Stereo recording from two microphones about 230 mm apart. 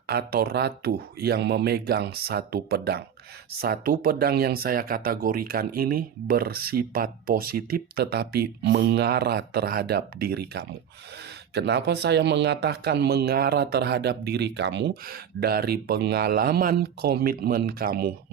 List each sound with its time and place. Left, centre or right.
0.1 s speech: right